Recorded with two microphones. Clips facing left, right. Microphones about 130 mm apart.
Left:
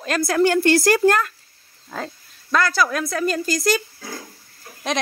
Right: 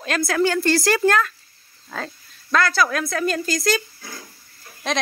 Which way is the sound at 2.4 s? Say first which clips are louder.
Even; 10° left (ahead or behind).